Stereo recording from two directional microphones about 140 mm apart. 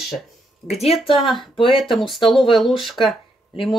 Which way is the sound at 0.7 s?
45° left (ahead or behind).